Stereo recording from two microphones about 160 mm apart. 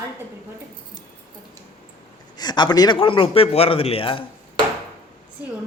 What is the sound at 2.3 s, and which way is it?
A man's voice, 25° left (ahead or behind).